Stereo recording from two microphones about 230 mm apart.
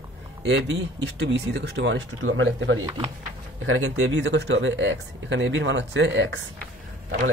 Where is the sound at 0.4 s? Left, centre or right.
Right.